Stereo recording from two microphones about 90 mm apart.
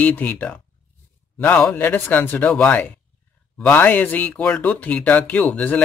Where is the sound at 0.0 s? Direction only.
20° left (ahead or behind).